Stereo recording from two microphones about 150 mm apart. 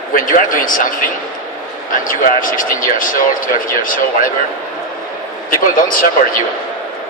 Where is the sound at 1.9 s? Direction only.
65° left (ahead or behind).